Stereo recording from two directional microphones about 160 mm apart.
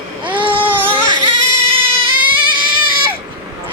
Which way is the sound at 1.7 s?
35° right (ahead or behind).